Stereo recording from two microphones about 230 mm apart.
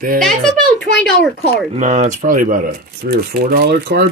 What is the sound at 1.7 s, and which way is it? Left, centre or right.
Speech, right.